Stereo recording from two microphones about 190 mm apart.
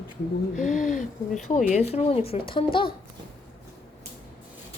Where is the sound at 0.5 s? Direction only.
40° left (ahead or behind).